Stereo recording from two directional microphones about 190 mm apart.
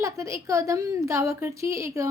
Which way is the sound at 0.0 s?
15° right (ahead or behind).